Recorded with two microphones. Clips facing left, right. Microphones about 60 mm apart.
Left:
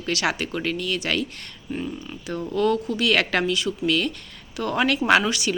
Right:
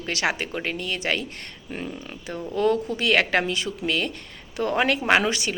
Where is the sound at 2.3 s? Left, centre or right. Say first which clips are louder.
Left 3 dB; centre.